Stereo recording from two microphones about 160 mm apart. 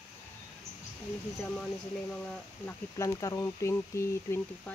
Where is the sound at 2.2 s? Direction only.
15° left (ahead or behind).